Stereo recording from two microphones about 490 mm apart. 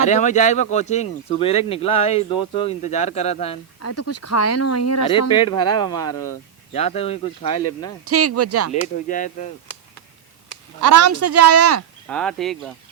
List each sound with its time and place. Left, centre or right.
0.0 s speech: centre
3.8 s speech: left
5.3 s speech: centre
8.0 s speech: right
8.7 s speech: centre
10.8 s speech: right
12.0 s speech: centre